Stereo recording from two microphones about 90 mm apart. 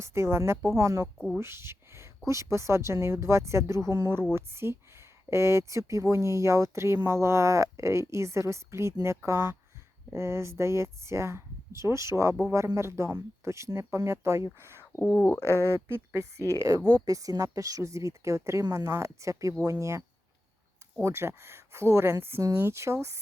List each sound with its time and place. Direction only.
0.0 s speech: 30° right (ahead or behind)
1.0 s speech: 5° left (ahead or behind)
1.4 s speech: 30° right (ahead or behind)
15.0 s speech: 20° left (ahead or behind)
15.9 s speech: 30° right (ahead or behind)